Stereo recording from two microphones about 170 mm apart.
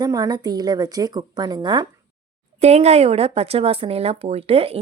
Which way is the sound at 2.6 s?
40° right (ahead or behind).